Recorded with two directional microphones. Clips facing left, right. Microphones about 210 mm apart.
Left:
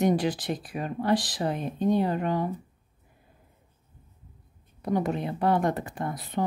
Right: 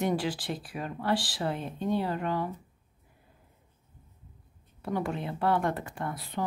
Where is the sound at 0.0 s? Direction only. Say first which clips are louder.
Left 5 dB; 20° left (ahead or behind).